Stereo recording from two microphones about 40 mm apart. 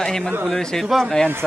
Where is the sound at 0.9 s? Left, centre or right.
Centre.